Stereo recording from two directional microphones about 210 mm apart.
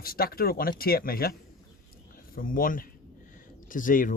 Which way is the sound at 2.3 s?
40° left (ahead or behind).